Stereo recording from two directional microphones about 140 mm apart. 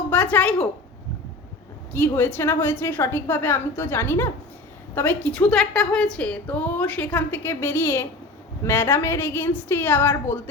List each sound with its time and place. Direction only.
0.1 s a woman's voice: 10° left (ahead or behind)
1.9 s a woman's voice: 15° left (ahead or behind)